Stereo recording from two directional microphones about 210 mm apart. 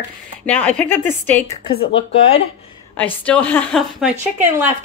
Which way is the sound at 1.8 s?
60° left (ahead or behind).